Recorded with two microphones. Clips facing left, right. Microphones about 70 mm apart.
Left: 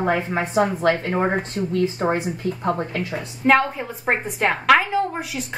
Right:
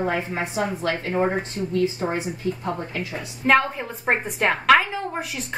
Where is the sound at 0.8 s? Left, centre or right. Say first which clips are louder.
Left 3 dB; left.